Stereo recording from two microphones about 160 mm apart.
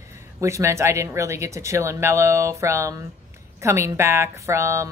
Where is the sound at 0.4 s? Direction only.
20° right (ahead or behind).